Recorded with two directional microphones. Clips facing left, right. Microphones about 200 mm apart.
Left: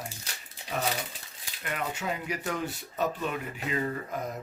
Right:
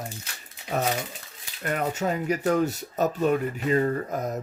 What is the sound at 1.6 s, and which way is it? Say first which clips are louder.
Speech: right 7 dB; 45° right (ahead or behind).